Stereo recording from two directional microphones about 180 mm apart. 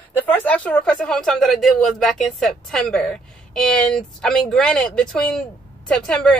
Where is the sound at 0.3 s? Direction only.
10° left (ahead or behind).